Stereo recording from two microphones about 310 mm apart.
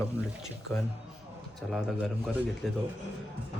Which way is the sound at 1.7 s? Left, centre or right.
Centre.